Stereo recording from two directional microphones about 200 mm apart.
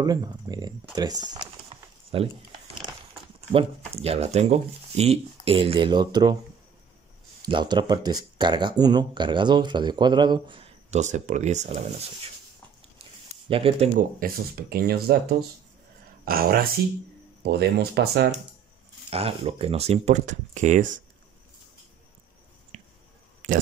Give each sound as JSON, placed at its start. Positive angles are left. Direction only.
{"t": 0.0, "sound": "speech", "side_deg": -20}
{"t": 0.9, "sound": "a sound", "side_deg": -20}
{"t": 3.3, "sound": "speech", "side_deg": -30}
{"t": 7.4, "sound": "speech", "side_deg": -20}
{"t": 13.5, "sound": "speech", "side_deg": -30}
{"t": 13.9, "sound": "speech", "side_deg": -50}
{"t": 16.3, "sound": "speech", "side_deg": -50}
{"t": 19.0, "sound": "speech", "side_deg": -30}
{"t": 22.7, "sound": "a sound", "side_deg": -35}